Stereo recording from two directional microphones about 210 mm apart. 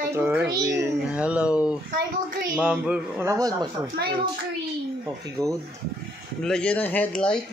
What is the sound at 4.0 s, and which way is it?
Speech, 50° right (ahead or behind).